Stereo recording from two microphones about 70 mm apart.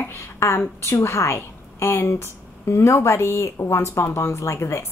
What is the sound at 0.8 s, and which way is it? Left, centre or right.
A woman's voice, left.